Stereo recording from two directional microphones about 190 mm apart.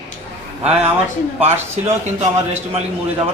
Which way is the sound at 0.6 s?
30° right (ahead or behind).